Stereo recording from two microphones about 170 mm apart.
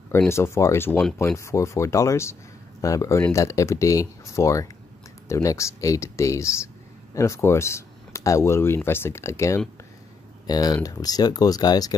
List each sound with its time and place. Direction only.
0.1 s speech: 15° left (ahead or behind)